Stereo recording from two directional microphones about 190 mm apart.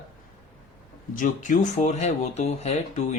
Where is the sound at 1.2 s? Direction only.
40° left (ahead or behind).